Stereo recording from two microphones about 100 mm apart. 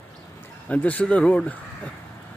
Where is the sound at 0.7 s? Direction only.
15° left (ahead or behind).